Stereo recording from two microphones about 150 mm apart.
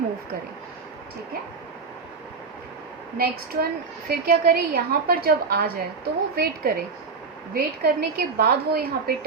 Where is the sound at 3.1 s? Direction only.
80° right.